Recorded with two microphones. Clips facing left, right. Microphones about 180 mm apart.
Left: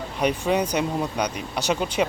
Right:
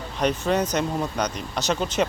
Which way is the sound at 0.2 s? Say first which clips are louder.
Even; 10° left (ahead or behind).